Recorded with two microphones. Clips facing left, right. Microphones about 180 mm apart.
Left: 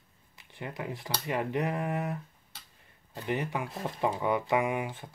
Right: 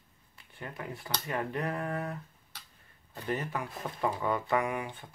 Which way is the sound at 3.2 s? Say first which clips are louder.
Left 2 dB; 15° left (ahead or behind).